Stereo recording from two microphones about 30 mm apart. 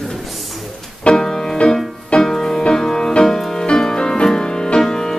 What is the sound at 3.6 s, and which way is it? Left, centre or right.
Music, left.